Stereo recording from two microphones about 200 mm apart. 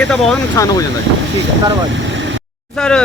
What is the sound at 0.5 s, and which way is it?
Speech, 15° left (ahead or behind).